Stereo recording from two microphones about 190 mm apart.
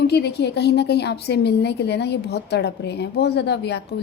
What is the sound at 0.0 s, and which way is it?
A woman's voice, 60° left (ahead or behind).